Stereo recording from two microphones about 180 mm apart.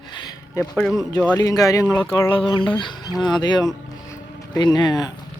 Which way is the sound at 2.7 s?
25° left (ahead or behind).